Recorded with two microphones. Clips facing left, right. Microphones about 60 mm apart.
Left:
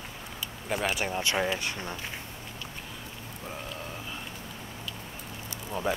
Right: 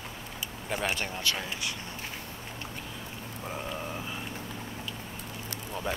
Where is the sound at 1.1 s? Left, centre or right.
Left.